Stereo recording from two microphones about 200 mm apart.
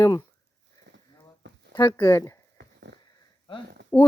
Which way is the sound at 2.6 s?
60° right (ahead or behind).